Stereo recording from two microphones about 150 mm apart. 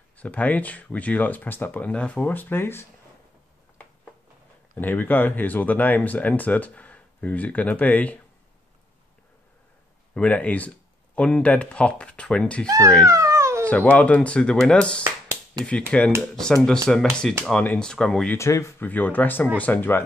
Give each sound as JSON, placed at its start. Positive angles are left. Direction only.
{"t": 0.2, "sound": "speech", "side_deg": 10}
{"t": 4.7, "sound": "speech", "side_deg": 10}
{"t": 10.1, "sound": "speech", "side_deg": 10}
{"t": 12.6, "sound": "speech", "side_deg": -20}
{"t": 13.1, "sound": "a sound", "side_deg": -20}
{"t": 13.7, "sound": "speech", "side_deg": 10}
{"t": 15.6, "sound": "speech", "side_deg": -25}
{"t": 16.2, "sound": "speech", "side_deg": 5}
{"t": 18.4, "sound": "speech", "side_deg": 20}